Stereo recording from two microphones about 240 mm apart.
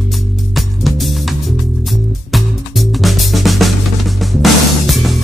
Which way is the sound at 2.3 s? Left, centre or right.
Centre.